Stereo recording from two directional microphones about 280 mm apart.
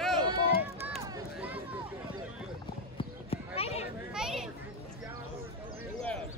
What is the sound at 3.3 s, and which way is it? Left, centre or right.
Basketball bounce, left.